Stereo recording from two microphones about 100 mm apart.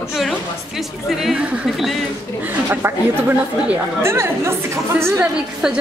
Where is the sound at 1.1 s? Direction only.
5° right (ahead or behind).